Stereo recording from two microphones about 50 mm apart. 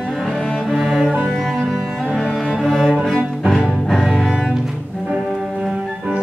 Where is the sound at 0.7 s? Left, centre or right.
Centre.